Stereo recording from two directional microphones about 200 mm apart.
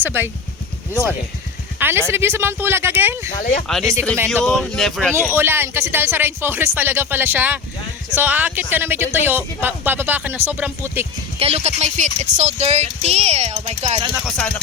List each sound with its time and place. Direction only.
0.0 s speech: 10° right (ahead or behind)
1.8 s speech: 10° right (ahead or behind)
3.2 s speech: 35° left (ahead or behind)
3.7 s speech: centre (ahead or behind)
5.3 s speech: 10° right (ahead or behind)
11.3 s speech: 30° right (ahead or behind)
14.3 s speech: 5° left (ahead or behind)